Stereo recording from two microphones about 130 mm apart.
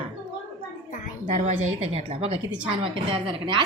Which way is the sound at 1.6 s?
50° right (ahead or behind).